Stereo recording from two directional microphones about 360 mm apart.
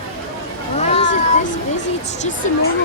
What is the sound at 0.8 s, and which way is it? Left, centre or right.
Cat, centre.